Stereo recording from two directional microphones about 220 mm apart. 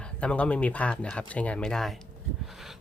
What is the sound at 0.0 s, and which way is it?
Speech, 5° left (ahead or behind).